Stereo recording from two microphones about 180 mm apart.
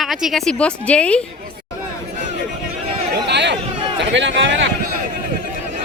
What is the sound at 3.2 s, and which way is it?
Chatter, 70° right (ahead or behind).